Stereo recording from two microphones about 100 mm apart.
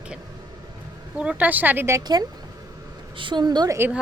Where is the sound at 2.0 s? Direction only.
40° right (ahead or behind).